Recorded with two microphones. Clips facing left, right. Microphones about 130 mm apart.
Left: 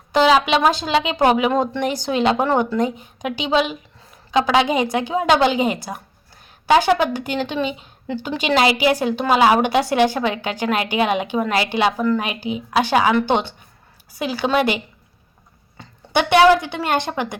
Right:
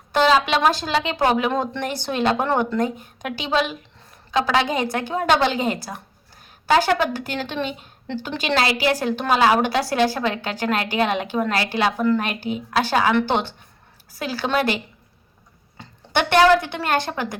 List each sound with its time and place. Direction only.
0.1 s a woman's voice: 10° left (ahead or behind)
11.9 s a woman's voice: centre (ahead or behind)
14.2 s a woman's voice: 15° left (ahead or behind)
16.1 s a woman's voice: 10° left (ahead or behind)